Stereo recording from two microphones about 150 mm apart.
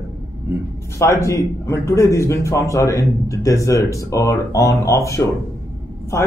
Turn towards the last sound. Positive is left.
turn(degrees=15)  # may be behind; listen again after turning